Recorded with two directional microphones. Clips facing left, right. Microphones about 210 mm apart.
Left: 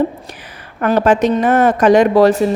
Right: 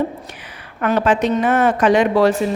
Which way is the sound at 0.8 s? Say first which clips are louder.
Left 4 dB; 40° left (ahead or behind).